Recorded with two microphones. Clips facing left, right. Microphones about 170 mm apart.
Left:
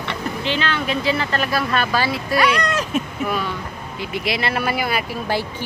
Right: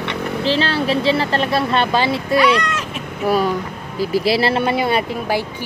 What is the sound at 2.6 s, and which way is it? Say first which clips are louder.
Speech: left 4 dB; 35° left (ahead or behind).